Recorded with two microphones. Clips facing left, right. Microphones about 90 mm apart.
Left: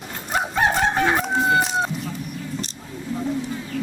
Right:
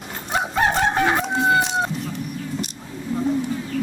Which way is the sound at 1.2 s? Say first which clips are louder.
Even; centre (ahead or behind).